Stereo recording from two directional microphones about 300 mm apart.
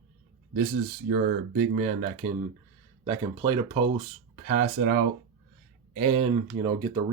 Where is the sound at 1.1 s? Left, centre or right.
Right.